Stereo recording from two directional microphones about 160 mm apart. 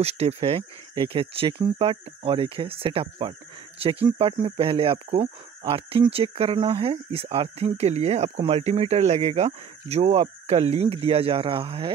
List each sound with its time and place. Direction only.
0.0 s speech: 40° right (ahead or behind)